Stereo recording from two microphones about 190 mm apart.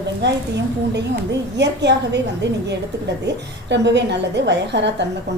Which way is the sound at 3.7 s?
65° right (ahead or behind).